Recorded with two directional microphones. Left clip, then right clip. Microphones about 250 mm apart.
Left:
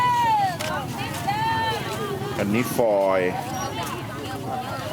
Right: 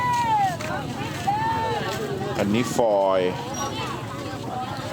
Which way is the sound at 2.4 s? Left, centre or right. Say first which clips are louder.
Even; centre.